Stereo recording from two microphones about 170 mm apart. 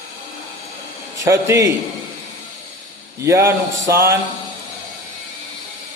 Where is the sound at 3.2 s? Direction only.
15° right (ahead or behind).